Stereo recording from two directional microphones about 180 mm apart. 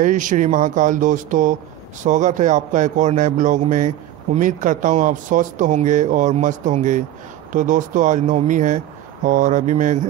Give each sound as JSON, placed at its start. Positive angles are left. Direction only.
{"t": 0.0, "sound": "a man's voice", "side_deg": -45}